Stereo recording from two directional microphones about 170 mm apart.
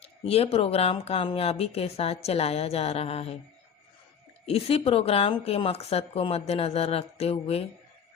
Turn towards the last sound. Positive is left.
turn(degrees=35)  # may be behind; listen again after turning